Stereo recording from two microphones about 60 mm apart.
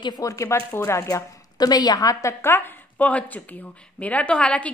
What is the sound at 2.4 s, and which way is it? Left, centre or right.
Speech, left.